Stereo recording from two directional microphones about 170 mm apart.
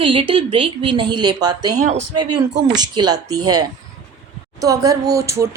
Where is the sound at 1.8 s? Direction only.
40° right (ahead or behind).